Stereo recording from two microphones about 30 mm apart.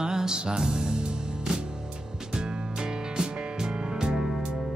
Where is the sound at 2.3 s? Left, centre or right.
Right.